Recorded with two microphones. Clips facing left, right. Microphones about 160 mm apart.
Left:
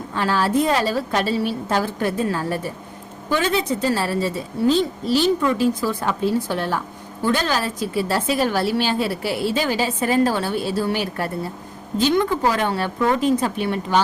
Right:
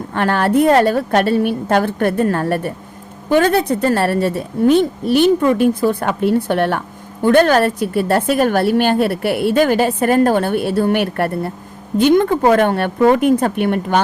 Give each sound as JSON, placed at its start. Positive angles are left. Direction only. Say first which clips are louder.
{"t": 0.1, "sound": "a woman's voice", "louder": "right 5 dB", "side_deg": -60}